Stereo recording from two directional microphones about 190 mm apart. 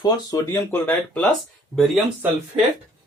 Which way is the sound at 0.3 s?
20° left (ahead or behind).